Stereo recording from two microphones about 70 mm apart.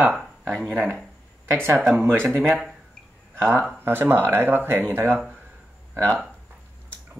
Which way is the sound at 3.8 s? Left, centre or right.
Right.